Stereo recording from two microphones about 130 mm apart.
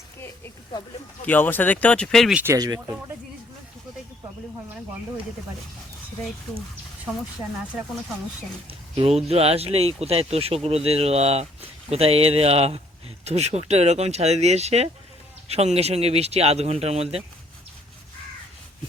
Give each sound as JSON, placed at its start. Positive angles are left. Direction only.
{"t": 1.2, "sound": "speech", "side_deg": 15}
{"t": 2.3, "sound": "speech", "side_deg": -15}
{"t": 2.6, "sound": "speech", "side_deg": -30}
{"t": 9.0, "sound": "speech", "side_deg": -50}